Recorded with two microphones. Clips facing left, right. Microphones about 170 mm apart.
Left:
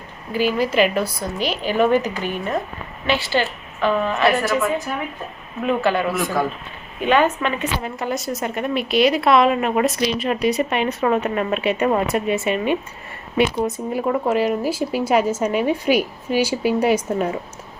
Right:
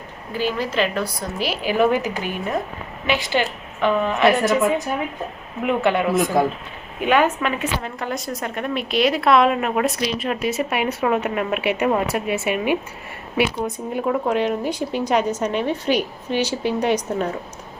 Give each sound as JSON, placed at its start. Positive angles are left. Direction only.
{"t": 0.3, "sound": "a woman's voice", "side_deg": 10}
{"t": 1.4, "sound": "a woman's voice", "side_deg": -5}
{"t": 7.0, "sound": "a woman's voice", "side_deg": -10}
{"t": 7.8, "sound": "a woman's voice", "side_deg": 5}
{"t": 13.7, "sound": "a woman's voice", "side_deg": 5}